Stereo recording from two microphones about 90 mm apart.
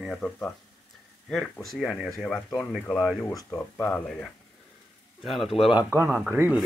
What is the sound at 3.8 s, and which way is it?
Speech, 10° left (ahead or behind).